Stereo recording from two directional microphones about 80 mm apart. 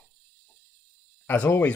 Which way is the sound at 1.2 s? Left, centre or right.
Left.